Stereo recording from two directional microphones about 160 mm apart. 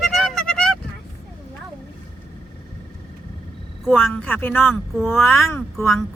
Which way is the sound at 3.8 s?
Centre (ahead or behind).